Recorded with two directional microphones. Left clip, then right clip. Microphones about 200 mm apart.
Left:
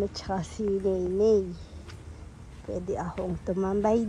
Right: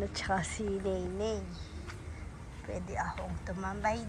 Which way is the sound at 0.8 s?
30° left (ahead or behind).